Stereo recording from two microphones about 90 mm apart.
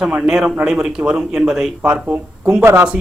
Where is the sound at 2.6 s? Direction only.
30° right (ahead or behind).